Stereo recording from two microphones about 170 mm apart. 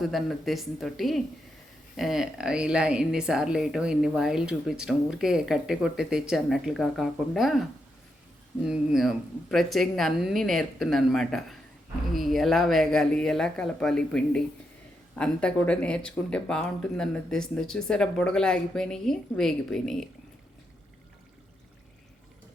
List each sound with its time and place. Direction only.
0.0 s a woman's voice: centre (ahead or behind)
8.6 s a woman's voice: 5° right (ahead or behind)